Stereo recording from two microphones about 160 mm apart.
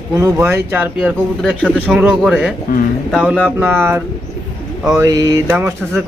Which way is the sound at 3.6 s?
15° right (ahead or behind).